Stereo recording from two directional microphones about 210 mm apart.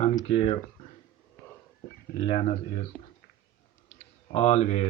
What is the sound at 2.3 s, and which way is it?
Speech, 30° left (ahead or behind).